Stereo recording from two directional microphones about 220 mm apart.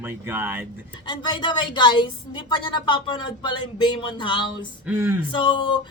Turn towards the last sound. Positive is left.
turn(degrees=20)  # may be behind; listen again after turning